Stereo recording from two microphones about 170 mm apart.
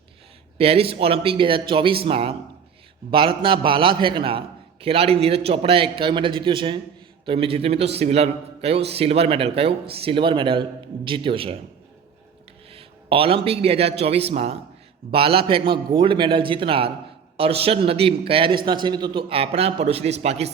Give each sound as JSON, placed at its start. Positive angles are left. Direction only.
{"t": 0.6, "sound": "a man's voice", "side_deg": -35}
{"t": 12.7, "sound": "a man's voice", "side_deg": -35}